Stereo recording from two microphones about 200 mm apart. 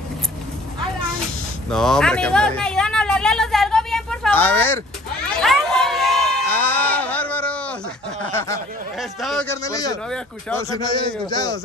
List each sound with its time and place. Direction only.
1.7 s a sound: 5° left (ahead or behind)
6.5 s sheep: 10° left (ahead or behind)
8.3 s a sound: 10° left (ahead or behind)
9.2 s speech: centre (ahead or behind)
9.5 s speech: 15° left (ahead or behind)
10.0 s speech: 5° left (ahead or behind)
10.6 s speech: 20° left (ahead or behind)